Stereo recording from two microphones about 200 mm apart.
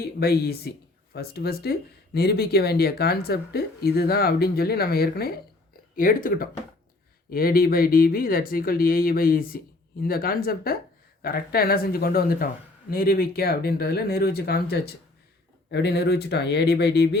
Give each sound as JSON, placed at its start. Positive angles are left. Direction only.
{"t": 0.0, "sound": "speech", "side_deg": 50}